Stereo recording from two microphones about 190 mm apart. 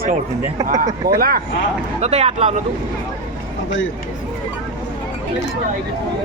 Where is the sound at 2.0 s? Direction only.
35° right (ahead or behind).